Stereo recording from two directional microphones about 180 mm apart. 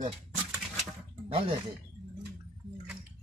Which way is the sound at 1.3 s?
35° right (ahead or behind).